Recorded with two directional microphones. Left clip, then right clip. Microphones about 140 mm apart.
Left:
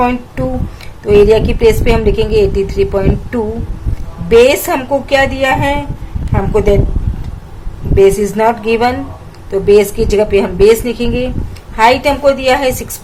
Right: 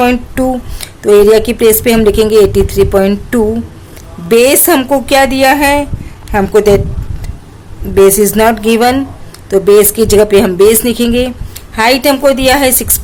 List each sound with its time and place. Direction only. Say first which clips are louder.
0.0 s a woman's voice: right 4 dB; 90° right
7.9 s speech: right 3 dB; 75° right (ahead or behind)
9.5 s speech: right 3 dB; 65° right (ahead or behind)